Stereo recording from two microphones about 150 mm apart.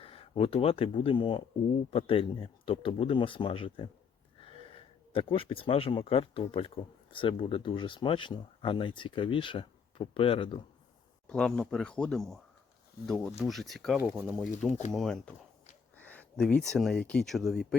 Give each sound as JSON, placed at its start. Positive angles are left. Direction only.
{"t": 0.0, "sound": "speech", "side_deg": 40}
{"t": 4.4, "sound": "gasp", "side_deg": 35}
{"t": 6.5, "sound": "speech", "side_deg": 40}
{"t": 11.3, "sound": "speech", "side_deg": 5}
{"t": 14.0, "sound": "speech", "side_deg": -10}
{"t": 14.6, "sound": "speech", "side_deg": 0}